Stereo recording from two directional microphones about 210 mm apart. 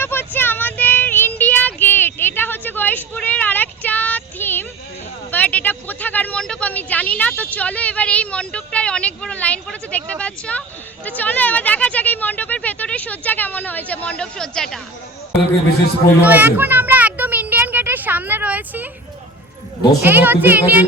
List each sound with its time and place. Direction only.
0.0 s child singing: 10° left (ahead or behind)
5.3 s speech: 5° left (ahead or behind)
16.2 s children playing: 10° right (ahead or behind)
20.0 s child singing: 10° right (ahead or behind)